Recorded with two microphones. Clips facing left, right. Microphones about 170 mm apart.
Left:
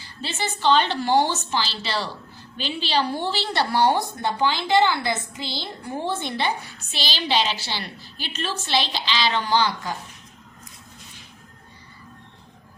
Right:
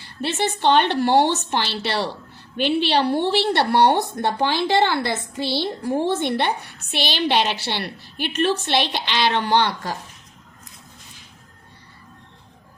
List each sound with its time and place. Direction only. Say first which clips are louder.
0.0 s a woman's voice: right 6 dB; 65° right (ahead or behind)
6.2 s a woman's voice: right 4 dB; 65° right (ahead or behind)